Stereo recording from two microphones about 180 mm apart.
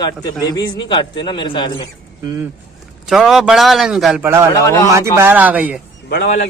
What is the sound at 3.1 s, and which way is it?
A man's voice, centre (ahead or behind).